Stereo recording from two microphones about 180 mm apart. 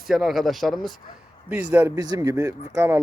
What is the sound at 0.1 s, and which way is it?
Speech, centre (ahead or behind).